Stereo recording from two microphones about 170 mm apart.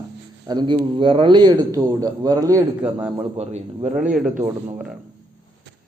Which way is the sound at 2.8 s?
5° right (ahead or behind).